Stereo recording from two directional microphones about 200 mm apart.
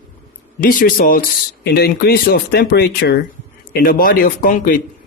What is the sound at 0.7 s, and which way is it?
Speech, 45° left (ahead or behind).